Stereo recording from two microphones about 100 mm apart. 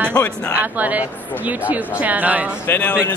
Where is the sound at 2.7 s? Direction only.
20° left (ahead or behind).